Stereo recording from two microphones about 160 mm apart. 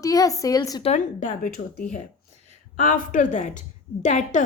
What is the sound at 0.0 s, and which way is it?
Speech, 20° left (ahead or behind).